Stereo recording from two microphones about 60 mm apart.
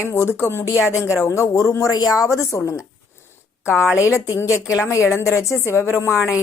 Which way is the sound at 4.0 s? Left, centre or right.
Left.